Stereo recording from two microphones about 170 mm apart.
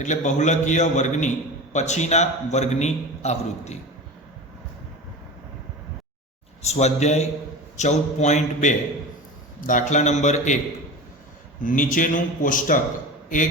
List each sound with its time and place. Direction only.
0.0 s a man's voice: 45° left (ahead or behind)
6.6 s a man's voice: 40° left (ahead or behind)
11.6 s a man's voice: 50° left (ahead or behind)